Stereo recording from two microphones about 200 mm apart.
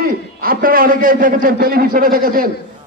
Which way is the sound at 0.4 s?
45° right (ahead or behind).